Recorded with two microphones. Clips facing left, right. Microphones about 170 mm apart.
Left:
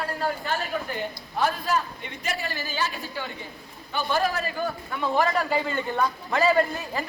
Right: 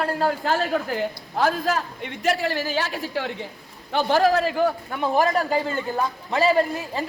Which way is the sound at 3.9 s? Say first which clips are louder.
Right 7 dB; 90° right.